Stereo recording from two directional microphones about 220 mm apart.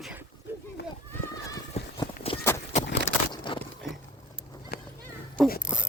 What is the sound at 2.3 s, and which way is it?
Walk, 25° left (ahead or behind).